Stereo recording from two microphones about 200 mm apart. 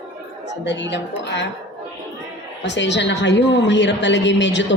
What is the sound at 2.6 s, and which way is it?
A woman's voice, 60° left (ahead or behind).